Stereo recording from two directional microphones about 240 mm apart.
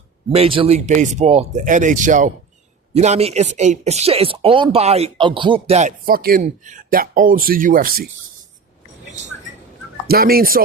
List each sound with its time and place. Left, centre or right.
0.3 s speech: right
10.1 s speech: right